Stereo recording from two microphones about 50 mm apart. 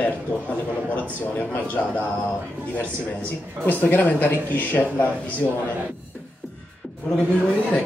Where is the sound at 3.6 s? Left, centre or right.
Left.